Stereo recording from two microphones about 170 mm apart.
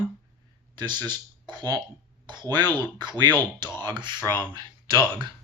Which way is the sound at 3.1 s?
25° right (ahead or behind).